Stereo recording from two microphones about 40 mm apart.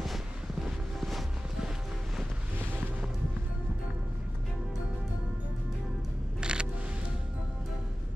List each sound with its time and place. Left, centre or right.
0.0 s music: centre
6.4 s single-lens reflex camera: right